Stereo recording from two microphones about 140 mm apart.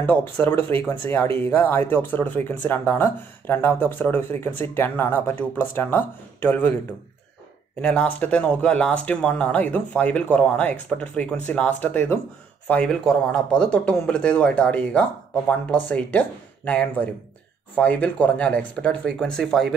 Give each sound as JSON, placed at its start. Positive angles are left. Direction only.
{"t": 0.0, "sound": "speech", "side_deg": 15}
{"t": 7.8, "sound": "speech", "side_deg": 10}